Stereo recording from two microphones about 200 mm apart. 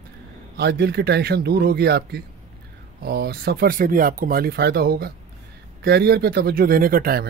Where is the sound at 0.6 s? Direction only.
55° right (ahead or behind).